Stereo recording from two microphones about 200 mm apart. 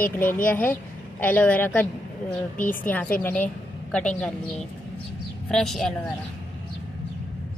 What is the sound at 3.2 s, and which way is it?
Speech, 10° left (ahead or behind).